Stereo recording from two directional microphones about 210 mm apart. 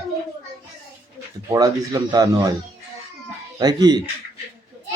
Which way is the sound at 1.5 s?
15° right (ahead or behind).